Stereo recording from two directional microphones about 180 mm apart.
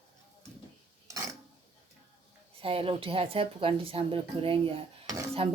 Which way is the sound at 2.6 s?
30° right (ahead or behind).